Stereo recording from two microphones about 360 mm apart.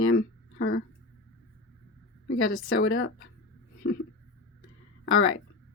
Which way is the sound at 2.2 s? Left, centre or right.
Left.